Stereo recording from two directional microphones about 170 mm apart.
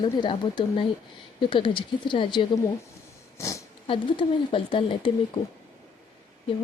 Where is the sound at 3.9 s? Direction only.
30° left (ahead or behind).